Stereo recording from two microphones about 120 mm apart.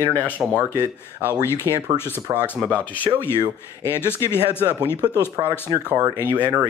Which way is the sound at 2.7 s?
15° left (ahead or behind).